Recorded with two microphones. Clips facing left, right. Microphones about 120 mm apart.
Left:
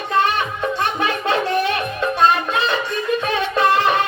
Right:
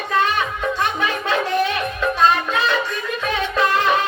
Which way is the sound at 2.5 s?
30° left (ahead or behind).